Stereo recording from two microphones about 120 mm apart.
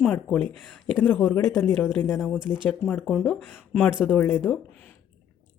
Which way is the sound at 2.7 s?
5° left (ahead or behind).